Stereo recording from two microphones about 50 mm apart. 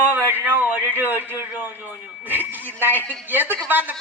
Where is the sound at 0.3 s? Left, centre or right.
Right.